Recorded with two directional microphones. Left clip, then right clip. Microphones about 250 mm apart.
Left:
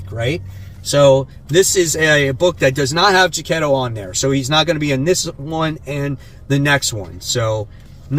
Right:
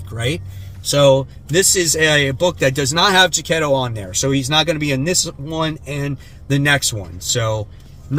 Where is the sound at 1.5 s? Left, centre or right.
Centre.